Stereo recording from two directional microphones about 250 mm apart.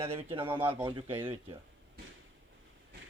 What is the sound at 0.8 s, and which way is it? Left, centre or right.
Speech, centre.